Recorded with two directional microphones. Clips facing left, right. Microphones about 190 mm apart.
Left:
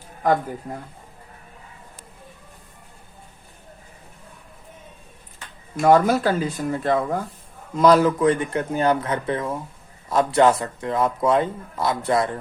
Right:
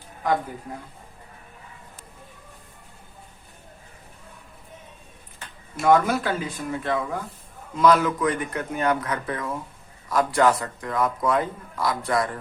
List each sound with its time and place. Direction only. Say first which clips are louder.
5.8 s a man's voice: left 3 dB; 40° left (ahead or behind)